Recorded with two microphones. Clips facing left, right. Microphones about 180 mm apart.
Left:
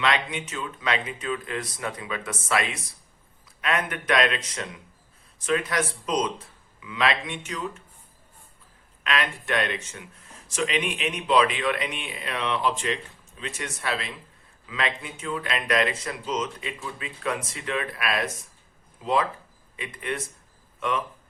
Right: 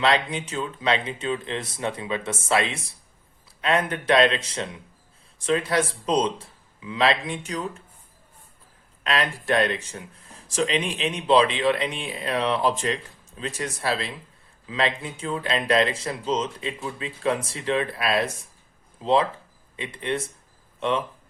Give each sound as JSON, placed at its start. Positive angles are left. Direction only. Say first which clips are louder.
{"t": 0.0, "sound": "speech", "louder": "right 3 dB", "side_deg": -35}
{"t": 9.0, "sound": "speech", "louder": "right 3 dB", "side_deg": -35}